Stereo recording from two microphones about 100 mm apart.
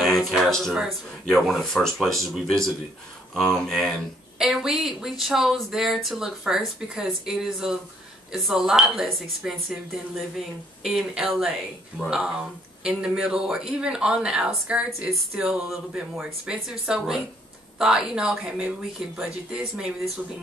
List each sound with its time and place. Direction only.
0.0 s a sound: centre (ahead or behind)
1.2 s speech: 5° left (ahead or behind)
4.4 s speech: 5° right (ahead or behind)